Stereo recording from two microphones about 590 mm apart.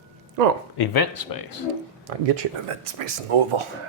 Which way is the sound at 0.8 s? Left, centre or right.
Left.